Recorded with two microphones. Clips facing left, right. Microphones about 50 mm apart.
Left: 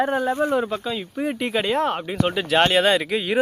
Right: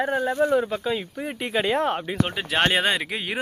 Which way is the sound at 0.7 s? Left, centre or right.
Centre.